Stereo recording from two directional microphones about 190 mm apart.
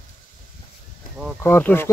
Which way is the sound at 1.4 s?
10° left (ahead or behind).